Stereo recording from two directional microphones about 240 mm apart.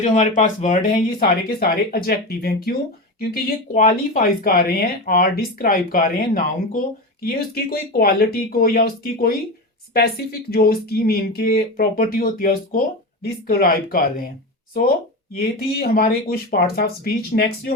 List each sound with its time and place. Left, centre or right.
0.0 s speech: left
15.4 s speech: left